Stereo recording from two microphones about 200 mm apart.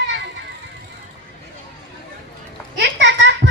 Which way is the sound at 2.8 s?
60° right (ahead or behind).